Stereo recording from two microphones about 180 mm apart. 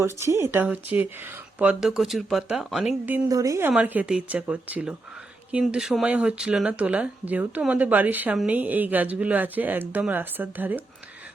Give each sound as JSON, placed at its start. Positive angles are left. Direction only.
{"t": 0.0, "sound": "speech", "side_deg": -15}
{"t": 3.2, "sound": "speech", "side_deg": -20}